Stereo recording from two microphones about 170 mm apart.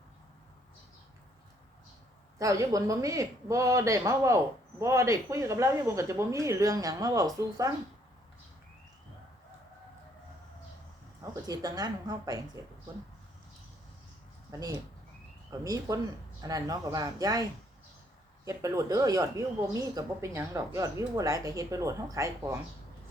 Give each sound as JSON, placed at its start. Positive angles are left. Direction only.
{"t": 2.4, "sound": "speech", "side_deg": -20}
{"t": 11.2, "sound": "speech", "side_deg": -20}
{"t": 15.6, "sound": "speech", "side_deg": -20}
{"t": 18.4, "sound": "speech", "side_deg": -20}